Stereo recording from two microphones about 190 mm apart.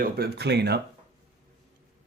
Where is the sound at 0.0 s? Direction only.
60° right (ahead or behind).